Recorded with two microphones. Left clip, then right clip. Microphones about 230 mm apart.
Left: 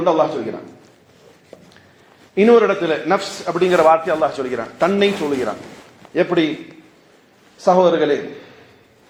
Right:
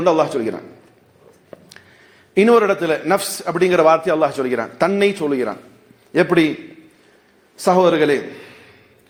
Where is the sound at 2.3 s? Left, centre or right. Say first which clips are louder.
Left 1 dB; right.